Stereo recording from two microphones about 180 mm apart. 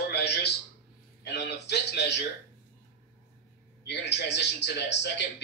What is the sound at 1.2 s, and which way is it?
Speech, 70° left (ahead or behind).